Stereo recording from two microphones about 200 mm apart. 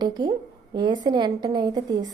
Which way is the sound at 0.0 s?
20° right (ahead or behind).